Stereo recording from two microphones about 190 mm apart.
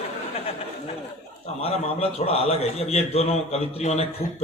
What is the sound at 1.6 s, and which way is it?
A man's voice, 30° left (ahead or behind).